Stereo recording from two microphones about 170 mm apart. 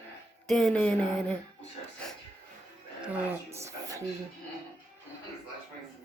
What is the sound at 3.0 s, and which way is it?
A woman's voice, 10° right (ahead or behind).